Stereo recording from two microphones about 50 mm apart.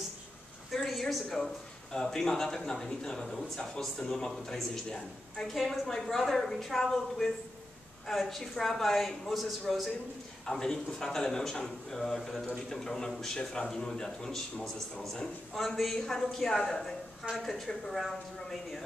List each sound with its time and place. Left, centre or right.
0.7 s speech: centre
5.5 s a woman's voice: centre
10.4 s speech: centre
13.4 s a woman's voice: left; by 18.8 s centre